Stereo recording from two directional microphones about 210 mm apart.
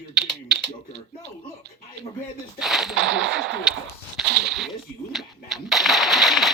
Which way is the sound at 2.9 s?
65° right (ahead or behind).